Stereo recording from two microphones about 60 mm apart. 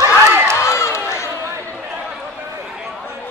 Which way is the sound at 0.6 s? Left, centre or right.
Left.